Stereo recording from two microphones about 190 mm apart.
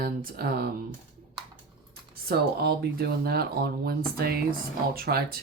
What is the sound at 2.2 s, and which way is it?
Speech, 55° right (ahead or behind).